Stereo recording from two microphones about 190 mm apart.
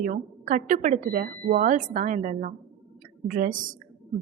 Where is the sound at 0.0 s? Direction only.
45° right (ahead or behind).